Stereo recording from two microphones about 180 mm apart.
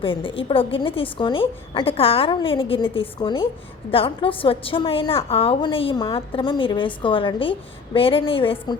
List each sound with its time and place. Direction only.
0.0 s a woman's voice: 30° left (ahead or behind)